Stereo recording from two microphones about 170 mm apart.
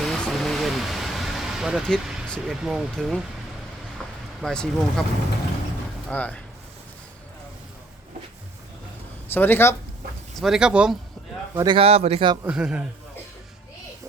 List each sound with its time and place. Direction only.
0.0 s vehicle: centre (ahead or behind)
3.9 s a sound: centre (ahead or behind)
6.1 s speech: 10° left (ahead or behind)
9.3 s speech: 10° left (ahead or behind)
10.3 s speech: centre (ahead or behind)
11.5 s speech: 25° right (ahead or behind)
12.5 s speech: 5° right (ahead or behind)